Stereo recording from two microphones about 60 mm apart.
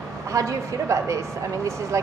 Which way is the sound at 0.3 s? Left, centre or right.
Right.